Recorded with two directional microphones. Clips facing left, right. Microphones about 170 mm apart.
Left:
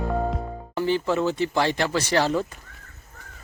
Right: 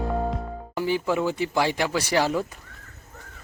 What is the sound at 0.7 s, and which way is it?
Speech, 10° right (ahead or behind).